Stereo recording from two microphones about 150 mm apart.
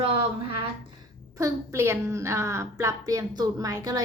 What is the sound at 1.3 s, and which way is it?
A child's voice, 20° right (ahead or behind).